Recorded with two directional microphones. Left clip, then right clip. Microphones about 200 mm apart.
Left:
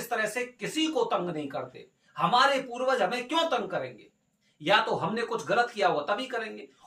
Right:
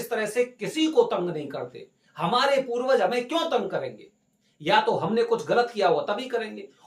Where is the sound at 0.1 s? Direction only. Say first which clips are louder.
Right 4 dB; 20° right (ahead or behind).